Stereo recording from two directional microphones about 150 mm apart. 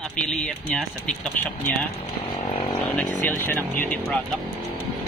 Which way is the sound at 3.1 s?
10° left (ahead or behind).